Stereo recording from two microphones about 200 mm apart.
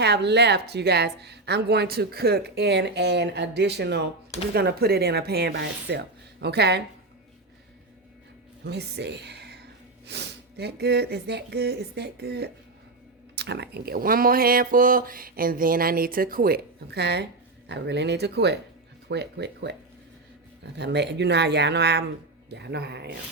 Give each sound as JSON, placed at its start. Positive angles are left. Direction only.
{"t": 0.0, "sound": "a woman's voice", "side_deg": -55}
{"t": 8.6, "sound": "a woman's voice", "side_deg": -55}
{"t": 20.7, "sound": "a woman's voice", "side_deg": -60}